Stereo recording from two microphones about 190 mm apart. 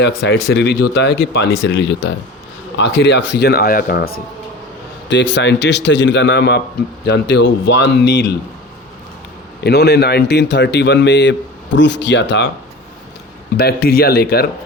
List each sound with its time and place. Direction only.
0.0 s speech: 60° left (ahead or behind)
5.0 s a man's voice: 70° left (ahead or behind)
9.6 s speech: 55° left (ahead or behind)
13.6 s speech: 55° left (ahead or behind)